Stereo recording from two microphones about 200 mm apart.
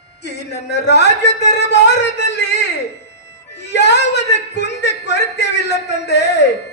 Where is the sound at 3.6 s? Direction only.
60° left (ahead or behind).